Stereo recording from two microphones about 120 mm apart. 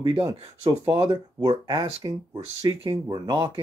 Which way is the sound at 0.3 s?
35° right (ahead or behind).